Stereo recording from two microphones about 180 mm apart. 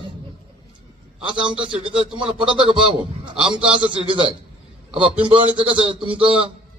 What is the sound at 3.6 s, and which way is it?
Speech, 30° right (ahead or behind).